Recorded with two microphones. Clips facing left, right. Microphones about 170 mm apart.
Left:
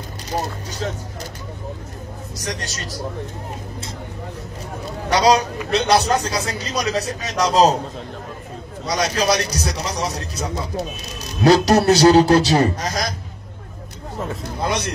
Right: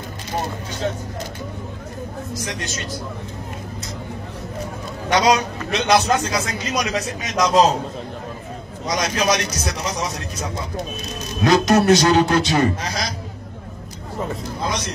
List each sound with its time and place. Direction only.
2.4 s a man's voice: 40° left (ahead or behind)
5.1 s a man's voice: 35° left (ahead or behind)
8.8 s a man's voice: 35° left (ahead or behind)